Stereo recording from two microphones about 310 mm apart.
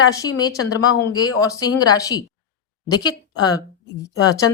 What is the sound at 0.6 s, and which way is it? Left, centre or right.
Speech, left.